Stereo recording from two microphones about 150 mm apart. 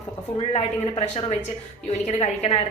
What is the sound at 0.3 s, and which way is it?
Speech, 35° left (ahead or behind).